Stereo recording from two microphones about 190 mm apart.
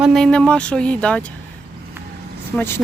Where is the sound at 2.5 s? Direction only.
15° left (ahead or behind).